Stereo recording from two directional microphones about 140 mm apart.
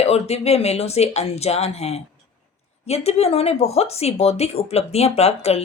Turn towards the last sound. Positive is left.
turn(degrees=50)  # may be behind; listen again after turning